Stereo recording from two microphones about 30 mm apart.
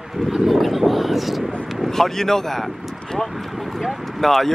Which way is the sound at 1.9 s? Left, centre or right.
Centre.